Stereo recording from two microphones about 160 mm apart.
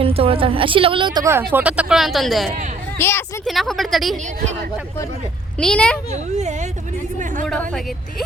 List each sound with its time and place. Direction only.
0.0 s a woman's voice: 35° right (ahead or behind)
1.2 s speech: 15° right (ahead or behind); by 2.5 s centre (ahead or behind)
3.0 s speech: 15° left (ahead or behind)
3.4 s speech: centre (ahead or behind)
5.5 s speech: 5° left (ahead or behind)
6.3 s speech: 45° right (ahead or behind)
7.4 s speech: 5° left (ahead or behind)